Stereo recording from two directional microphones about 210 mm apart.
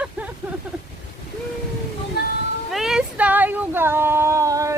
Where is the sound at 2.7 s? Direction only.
Centre (ahead or behind).